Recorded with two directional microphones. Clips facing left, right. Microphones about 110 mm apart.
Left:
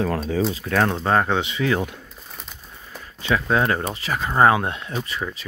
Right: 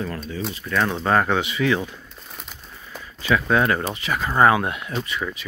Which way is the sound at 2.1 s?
5° right (ahead or behind).